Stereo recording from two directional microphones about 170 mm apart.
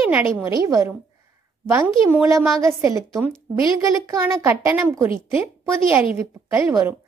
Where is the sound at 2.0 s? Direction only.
15° right (ahead or behind).